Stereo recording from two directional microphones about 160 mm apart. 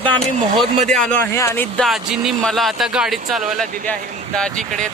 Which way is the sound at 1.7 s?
Centre (ahead or behind).